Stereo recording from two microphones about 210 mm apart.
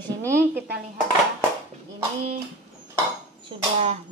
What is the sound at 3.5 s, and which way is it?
Speech, 30° right (ahead or behind).